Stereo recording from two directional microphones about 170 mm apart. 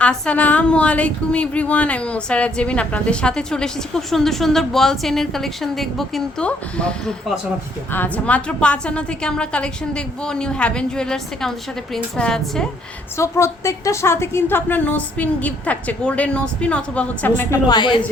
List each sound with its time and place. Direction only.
0.0 s speech: 5° left (ahead or behind)
13.1 s a woman's voice: 15° left (ahead or behind)